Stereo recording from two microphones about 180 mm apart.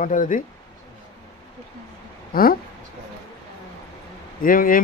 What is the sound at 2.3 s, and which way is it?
Speech, 55° left (ahead or behind).